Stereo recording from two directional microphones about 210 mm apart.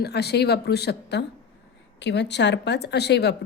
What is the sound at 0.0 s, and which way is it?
A woman's voice, 50° left (ahead or behind).